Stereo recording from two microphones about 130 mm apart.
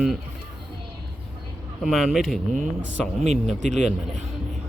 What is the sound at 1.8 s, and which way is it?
Speech, centre (ahead or behind).